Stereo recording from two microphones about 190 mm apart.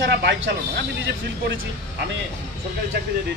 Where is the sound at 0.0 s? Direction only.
70° right (ahead or behind).